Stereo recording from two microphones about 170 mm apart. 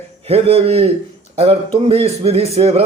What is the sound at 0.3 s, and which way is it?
Speech, 35° right (ahead or behind).